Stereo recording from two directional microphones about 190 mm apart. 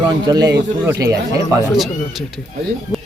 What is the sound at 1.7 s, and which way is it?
Speech, centre (ahead or behind).